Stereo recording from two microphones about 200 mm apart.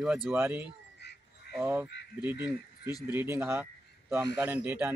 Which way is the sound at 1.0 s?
55° left (ahead or behind).